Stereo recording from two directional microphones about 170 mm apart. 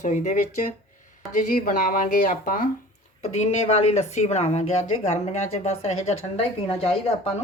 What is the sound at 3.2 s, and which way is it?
Speech, 40° left (ahead or behind).